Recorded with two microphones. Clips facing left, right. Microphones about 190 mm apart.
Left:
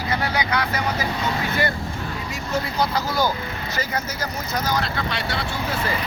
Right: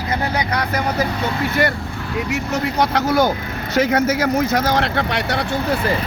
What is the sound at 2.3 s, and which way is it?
Speech, 85° right.